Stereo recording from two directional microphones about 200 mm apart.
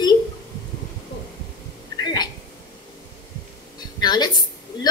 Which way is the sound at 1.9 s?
20° left (ahead or behind).